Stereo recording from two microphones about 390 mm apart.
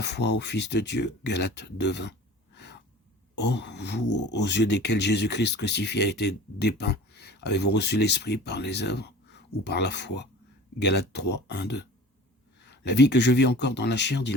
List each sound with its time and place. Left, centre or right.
0.0 s speech: left
3.3 s speech: left